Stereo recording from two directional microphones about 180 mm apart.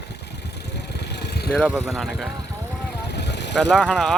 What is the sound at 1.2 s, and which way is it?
Vehicle, 65° left (ahead or behind).